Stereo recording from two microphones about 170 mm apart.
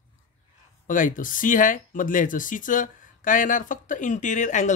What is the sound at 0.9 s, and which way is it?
Speech, 50° left (ahead or behind).